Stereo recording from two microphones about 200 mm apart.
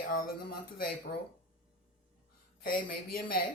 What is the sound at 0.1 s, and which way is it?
Speech, 45° left (ahead or behind).